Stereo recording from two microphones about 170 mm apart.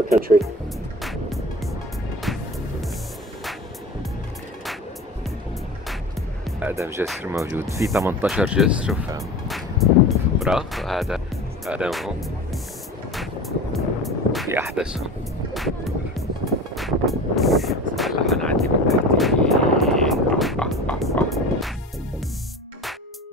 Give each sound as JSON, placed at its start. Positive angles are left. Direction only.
{"t": 2.3, "sound": "music", "side_deg": 0}
{"t": 6.6, "sound": "speech", "side_deg": -15}
{"t": 8.3, "sound": "speech", "side_deg": -5}
{"t": 9.5, "sound": "music", "side_deg": 0}
{"t": 11.6, "sound": "speech", "side_deg": -5}
{"t": 13.7, "sound": "music", "side_deg": 0}
{"t": 14.5, "sound": "speech", "side_deg": -10}
{"t": 15.5, "sound": "music", "side_deg": 0}
{"t": 16.7, "sound": "vehicle", "side_deg": 0}